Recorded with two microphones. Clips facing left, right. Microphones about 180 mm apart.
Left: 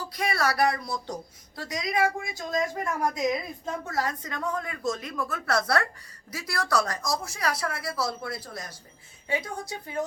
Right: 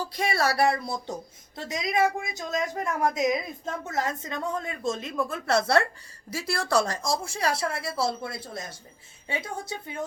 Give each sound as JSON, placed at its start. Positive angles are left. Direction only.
{"t": 0.1, "sound": "a woman's voice", "side_deg": -25}